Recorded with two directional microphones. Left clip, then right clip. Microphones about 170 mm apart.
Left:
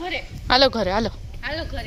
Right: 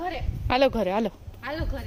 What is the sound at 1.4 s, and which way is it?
Speech, 70° right (ahead or behind).